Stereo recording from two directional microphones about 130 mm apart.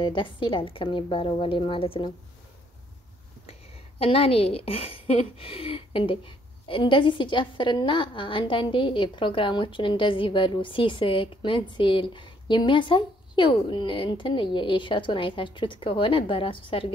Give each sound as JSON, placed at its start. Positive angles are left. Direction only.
{"t": 0.0, "sound": "a woman's voice", "side_deg": 40}
{"t": 4.0, "sound": "a woman's voice", "side_deg": 45}